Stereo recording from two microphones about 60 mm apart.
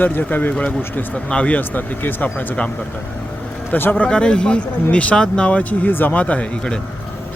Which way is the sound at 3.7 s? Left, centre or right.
Left.